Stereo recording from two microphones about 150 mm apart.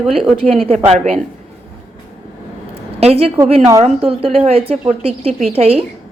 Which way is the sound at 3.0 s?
40° right (ahead or behind).